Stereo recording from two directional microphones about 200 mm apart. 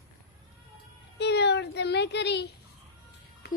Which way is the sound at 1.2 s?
55° left (ahead or behind).